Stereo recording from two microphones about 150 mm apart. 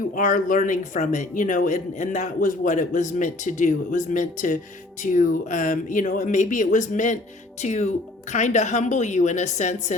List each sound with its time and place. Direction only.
0.1 s speech: 65° left (ahead or behind)